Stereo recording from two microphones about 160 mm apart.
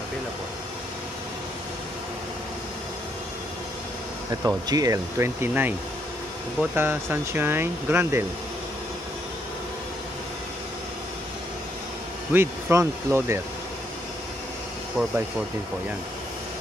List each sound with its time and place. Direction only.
4.3 s speech: 20° right (ahead or behind)
12.3 s speech: 15° right (ahead or behind)
15.0 s speech: 5° right (ahead or behind)